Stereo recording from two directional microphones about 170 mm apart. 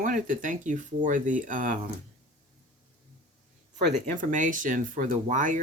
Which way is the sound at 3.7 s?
50° right (ahead or behind).